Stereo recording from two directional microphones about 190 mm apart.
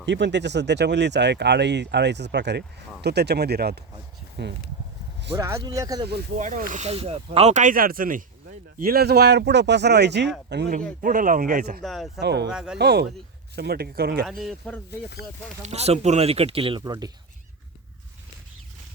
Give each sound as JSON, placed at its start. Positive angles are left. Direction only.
{"t": 0.0, "sound": "speech", "side_deg": -65}
{"t": 5.4, "sound": "speech", "side_deg": -15}
{"t": 6.3, "sound": "speech", "side_deg": -40}
{"t": 11.0, "sound": "speech", "side_deg": -45}
{"t": 11.8, "sound": "speech", "side_deg": 0}
{"t": 12.2, "sound": "speech", "side_deg": -60}
{"t": 12.5, "sound": "speech", "side_deg": -5}
{"t": 12.8, "sound": "speech", "side_deg": -60}
{"t": 14.3, "sound": "speech", "side_deg": 0}
{"t": 15.6, "sound": "speech", "side_deg": -35}